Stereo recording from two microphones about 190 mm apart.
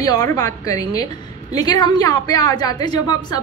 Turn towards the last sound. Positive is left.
turn(degrees=20)  # may be behind; listen again after turning